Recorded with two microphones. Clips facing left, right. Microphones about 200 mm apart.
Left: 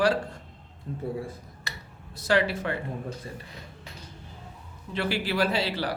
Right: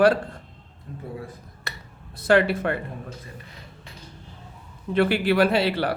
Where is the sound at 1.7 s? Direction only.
55° right (ahead or behind).